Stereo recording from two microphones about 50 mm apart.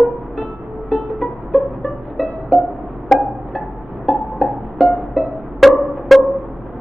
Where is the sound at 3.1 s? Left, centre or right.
Centre.